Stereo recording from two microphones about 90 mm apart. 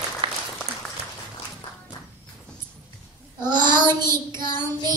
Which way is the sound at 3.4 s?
55° right (ahead or behind).